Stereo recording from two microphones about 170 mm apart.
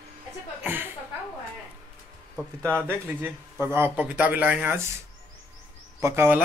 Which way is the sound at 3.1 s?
10° right (ahead or behind).